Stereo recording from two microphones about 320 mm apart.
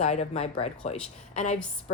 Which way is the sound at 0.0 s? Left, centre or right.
Centre.